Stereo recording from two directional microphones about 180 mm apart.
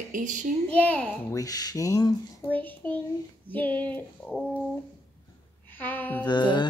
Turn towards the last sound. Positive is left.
turn(degrees=25)  # may be behind; listen again after turning